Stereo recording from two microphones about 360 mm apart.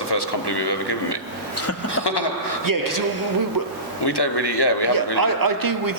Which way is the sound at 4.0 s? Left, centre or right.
Left.